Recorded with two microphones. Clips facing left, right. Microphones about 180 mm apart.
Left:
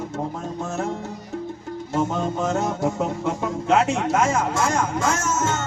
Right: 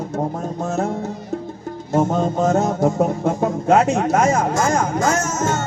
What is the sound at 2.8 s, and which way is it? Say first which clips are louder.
Speech: right 5 dB; 35° right (ahead or behind).